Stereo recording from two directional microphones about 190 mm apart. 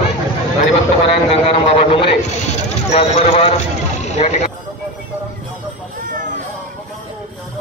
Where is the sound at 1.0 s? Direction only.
30° left (ahead or behind).